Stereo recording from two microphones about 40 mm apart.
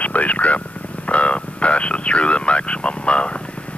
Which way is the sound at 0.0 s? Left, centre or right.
Left.